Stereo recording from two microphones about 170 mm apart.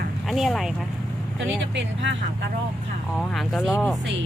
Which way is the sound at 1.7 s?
90° right.